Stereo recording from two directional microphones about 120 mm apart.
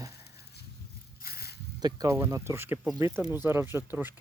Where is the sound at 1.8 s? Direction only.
30° right (ahead or behind).